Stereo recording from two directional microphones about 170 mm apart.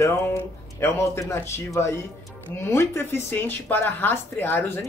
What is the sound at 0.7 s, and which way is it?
A woman's voice, 15° left (ahead or behind).